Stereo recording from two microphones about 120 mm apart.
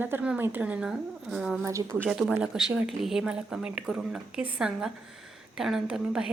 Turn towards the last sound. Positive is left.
turn(degrees=-5)  # may be behind; listen again after turning